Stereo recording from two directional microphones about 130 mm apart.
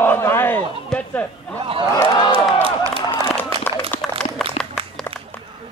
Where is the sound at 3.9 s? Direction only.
15° left (ahead or behind).